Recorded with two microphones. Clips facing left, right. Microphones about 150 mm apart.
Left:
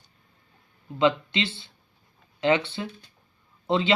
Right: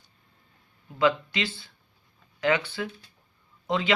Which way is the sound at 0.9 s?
25° left (ahead or behind).